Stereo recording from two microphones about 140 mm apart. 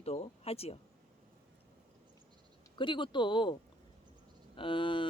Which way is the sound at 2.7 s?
35° left (ahead or behind).